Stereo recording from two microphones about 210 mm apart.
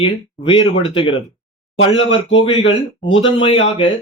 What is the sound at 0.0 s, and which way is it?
Speech, 25° left (ahead or behind).